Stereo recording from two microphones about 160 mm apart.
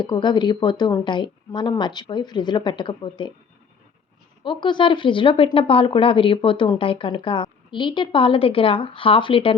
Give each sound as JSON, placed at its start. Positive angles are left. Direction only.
{"t": 0.0, "sound": "speech", "side_deg": 30}
{"t": 4.4, "sound": "speech", "side_deg": 30}